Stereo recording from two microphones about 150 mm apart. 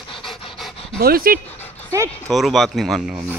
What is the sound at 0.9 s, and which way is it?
Speech, 85° right.